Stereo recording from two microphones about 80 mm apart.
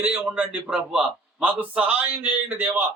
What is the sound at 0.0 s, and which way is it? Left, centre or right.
A man's voice, centre.